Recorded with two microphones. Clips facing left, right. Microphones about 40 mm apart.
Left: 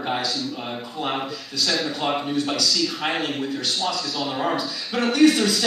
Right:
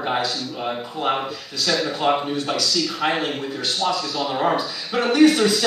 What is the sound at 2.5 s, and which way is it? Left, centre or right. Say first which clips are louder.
Speech: right 1 dB; right.